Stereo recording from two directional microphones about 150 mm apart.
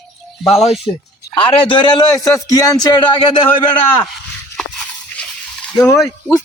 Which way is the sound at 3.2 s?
35° left (ahead or behind).